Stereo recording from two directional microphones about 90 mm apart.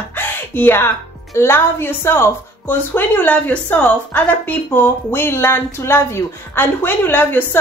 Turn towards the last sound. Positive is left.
turn(degrees=25)  # may be behind; listen again after turning